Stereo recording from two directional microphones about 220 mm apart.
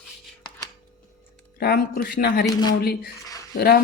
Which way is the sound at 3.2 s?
15° left (ahead or behind).